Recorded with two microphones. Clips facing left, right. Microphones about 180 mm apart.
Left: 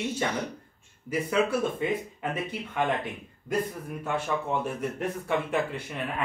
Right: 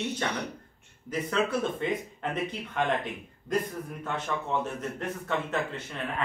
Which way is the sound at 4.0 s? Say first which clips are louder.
Left 4 dB; 10° left (ahead or behind).